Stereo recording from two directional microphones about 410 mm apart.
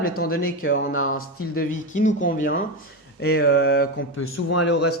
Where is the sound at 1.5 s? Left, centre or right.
Centre.